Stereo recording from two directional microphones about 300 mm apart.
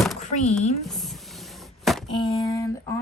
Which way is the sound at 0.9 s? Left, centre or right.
Centre.